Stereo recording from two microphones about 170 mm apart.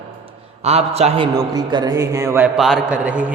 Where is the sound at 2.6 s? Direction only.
5° right (ahead or behind).